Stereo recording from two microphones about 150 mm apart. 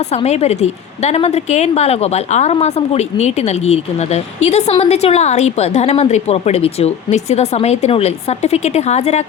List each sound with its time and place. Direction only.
0.1 s a woman's voice: 45° left (ahead or behind)